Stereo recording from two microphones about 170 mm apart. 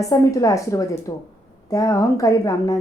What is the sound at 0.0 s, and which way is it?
A woman's voice, 20° left (ahead or behind).